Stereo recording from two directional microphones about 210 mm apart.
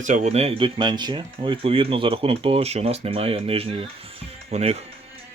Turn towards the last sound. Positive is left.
turn(degrees=-30)  # may be behind; listen again after turning